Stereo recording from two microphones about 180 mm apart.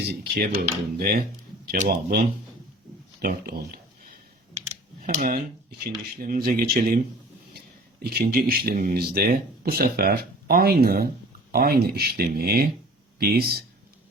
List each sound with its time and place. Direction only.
0.1 s speech: 60° right (ahead or behind)
5.0 s speech: 50° right (ahead or behind)